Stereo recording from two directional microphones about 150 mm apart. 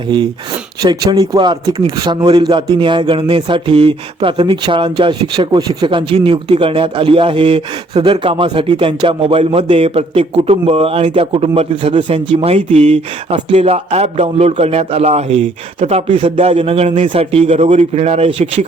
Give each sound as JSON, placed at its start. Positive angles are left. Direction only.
{"t": 0.8, "sound": "a man's voice", "side_deg": -25}